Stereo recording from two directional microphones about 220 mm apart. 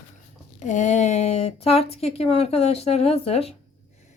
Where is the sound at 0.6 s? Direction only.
35° left (ahead or behind).